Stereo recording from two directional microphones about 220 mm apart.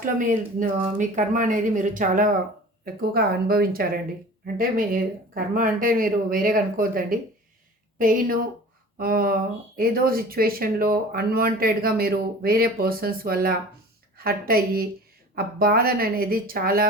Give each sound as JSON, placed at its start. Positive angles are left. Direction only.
{"t": 0.0, "sound": "speech", "side_deg": -40}